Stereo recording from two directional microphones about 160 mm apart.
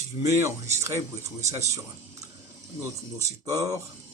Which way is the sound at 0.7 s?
15° right (ahead or behind).